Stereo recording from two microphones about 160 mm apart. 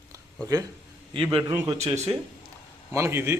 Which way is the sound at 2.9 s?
15° right (ahead or behind).